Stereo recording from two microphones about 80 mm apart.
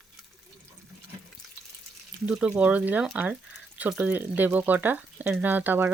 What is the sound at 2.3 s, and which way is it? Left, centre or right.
A woman's voice, centre.